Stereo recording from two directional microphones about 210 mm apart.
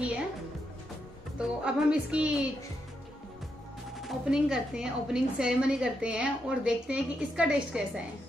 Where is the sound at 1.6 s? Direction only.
5° right (ahead or behind).